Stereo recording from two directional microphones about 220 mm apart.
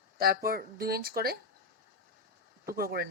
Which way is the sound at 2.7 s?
45° right (ahead or behind).